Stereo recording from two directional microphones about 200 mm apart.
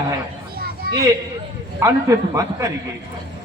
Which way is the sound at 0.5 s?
50° right (ahead or behind).